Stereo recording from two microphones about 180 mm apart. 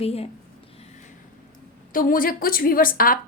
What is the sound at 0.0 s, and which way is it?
Speech, 35° left (ahead or behind).